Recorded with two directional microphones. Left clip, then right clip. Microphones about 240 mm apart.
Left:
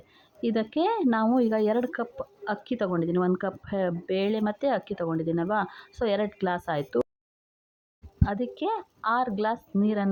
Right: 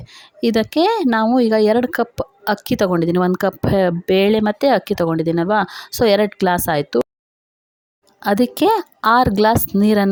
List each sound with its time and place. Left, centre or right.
0.1 s speech: right
8.2 s speech: right